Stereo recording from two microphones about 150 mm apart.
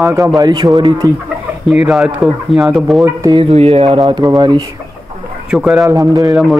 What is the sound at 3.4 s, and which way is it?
Speech, 45° right (ahead or behind).